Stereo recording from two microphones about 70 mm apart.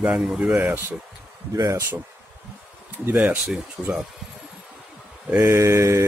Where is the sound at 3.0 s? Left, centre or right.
Right.